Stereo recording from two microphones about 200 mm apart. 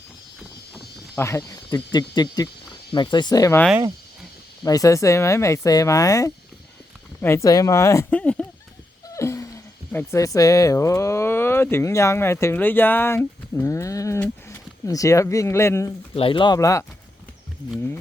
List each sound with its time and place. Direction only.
0.7 s speech: 10° left (ahead or behind)
4.6 s speech: 15° left (ahead or behind)
9.0 s a sound: 15° left (ahead or behind)
9.9 s speech: 10° left (ahead or behind)
16.1 s speech: 25° left (ahead or behind)